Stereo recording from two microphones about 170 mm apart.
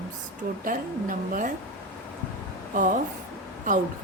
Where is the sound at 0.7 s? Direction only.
50° right (ahead or behind).